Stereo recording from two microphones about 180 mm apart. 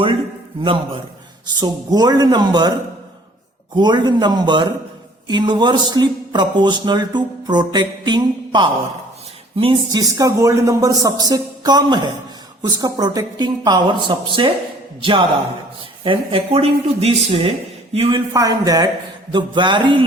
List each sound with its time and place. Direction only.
1.5 s a man's voice: 20° right (ahead or behind)
3.8 s a man's voice: 25° right (ahead or behind)
18.3 s a man's voice: 20° right (ahead or behind)